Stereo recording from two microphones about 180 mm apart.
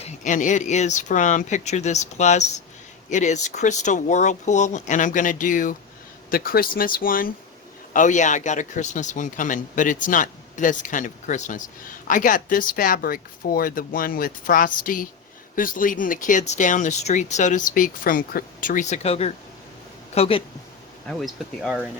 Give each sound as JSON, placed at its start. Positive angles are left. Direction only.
{"t": 0.0, "sound": "speech", "side_deg": 45}
{"t": 21.1, "sound": "speech", "side_deg": 0}